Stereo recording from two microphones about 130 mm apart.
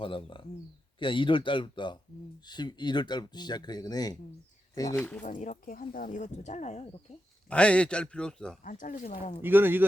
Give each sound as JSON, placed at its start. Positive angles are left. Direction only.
{"t": 0.0, "sound": "speech", "side_deg": 40}
{"t": 5.2, "sound": "speech", "side_deg": 80}
{"t": 7.5, "sound": "a man's voice", "side_deg": 10}
{"t": 8.6, "sound": "speech", "side_deg": 85}
{"t": 9.0, "sound": "speech", "side_deg": 65}
{"t": 9.4, "sound": "speech", "side_deg": -15}